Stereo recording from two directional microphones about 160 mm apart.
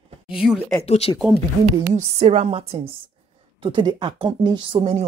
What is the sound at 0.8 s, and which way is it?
Speech, 40° left (ahead or behind).